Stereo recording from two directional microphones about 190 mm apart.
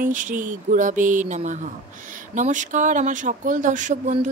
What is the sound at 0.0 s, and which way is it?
Speech, 45° right (ahead or behind).